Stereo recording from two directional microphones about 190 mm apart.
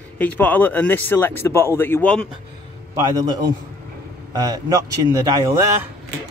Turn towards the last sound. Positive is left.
turn(degrees=-15)  # may be behind; listen again after turning